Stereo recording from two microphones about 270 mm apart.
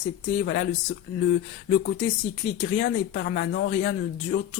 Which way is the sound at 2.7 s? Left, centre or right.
Left.